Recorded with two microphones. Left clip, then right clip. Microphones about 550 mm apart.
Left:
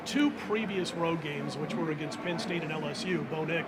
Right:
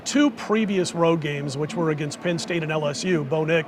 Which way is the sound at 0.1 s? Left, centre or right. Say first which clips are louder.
Right 8 dB; right.